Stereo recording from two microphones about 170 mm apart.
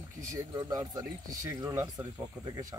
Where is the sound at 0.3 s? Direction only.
20° right (ahead or behind).